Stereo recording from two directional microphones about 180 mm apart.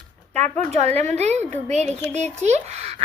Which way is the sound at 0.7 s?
40° right (ahead or behind).